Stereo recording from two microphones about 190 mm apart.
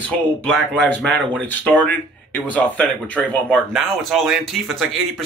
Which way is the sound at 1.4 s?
10° left (ahead or behind).